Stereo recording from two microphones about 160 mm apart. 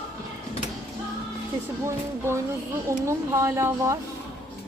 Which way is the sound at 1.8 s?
15° right (ahead or behind).